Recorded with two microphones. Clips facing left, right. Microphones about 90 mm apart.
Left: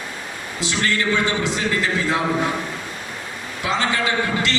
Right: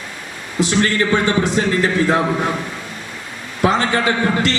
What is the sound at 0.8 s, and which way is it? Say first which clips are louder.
A man's voice: right 3 dB; 40° right (ahead or behind).